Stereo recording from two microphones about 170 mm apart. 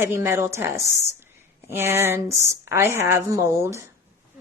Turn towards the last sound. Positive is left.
turn(degrees=-15)  # may be behind; listen again after turning